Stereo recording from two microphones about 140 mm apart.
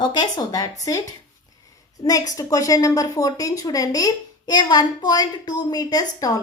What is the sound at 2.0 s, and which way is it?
A woman's voice, 25° left (ahead or behind).